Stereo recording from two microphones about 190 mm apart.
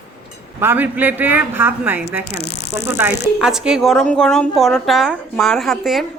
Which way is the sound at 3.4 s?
5° right (ahead or behind).